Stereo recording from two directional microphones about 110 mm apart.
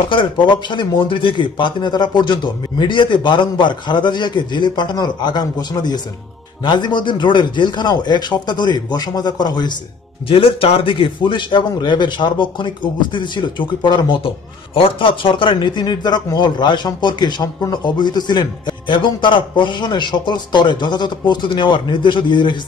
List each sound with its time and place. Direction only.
0.1 s a man's voice: 45° left (ahead or behind)
10.2 s a man's voice: 55° left (ahead or behind)
14.2 s a man's voice: 55° left (ahead or behind)